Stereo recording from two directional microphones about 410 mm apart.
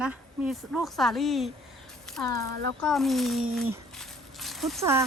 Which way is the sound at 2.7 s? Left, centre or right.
Centre.